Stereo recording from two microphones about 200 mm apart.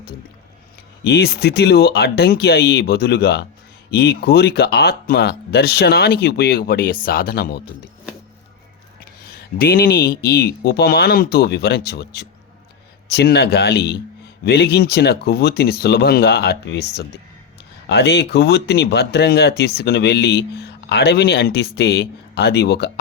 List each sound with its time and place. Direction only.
1.0 s speech: 55° left (ahead or behind)
9.2 s speech: 50° left (ahead or behind)